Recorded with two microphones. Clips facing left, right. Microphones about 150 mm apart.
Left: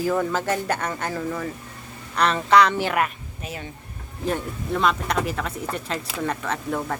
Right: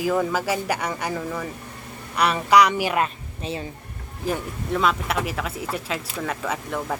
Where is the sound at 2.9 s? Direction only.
25° right (ahead or behind).